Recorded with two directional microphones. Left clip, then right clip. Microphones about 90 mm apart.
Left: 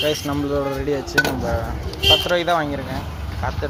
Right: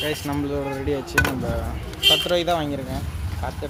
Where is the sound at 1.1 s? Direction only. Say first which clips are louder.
Left 3 dB; 30° right (ahead or behind).